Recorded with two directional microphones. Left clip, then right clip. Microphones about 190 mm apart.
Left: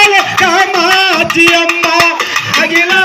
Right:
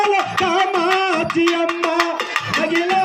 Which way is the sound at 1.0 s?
15° left (ahead or behind).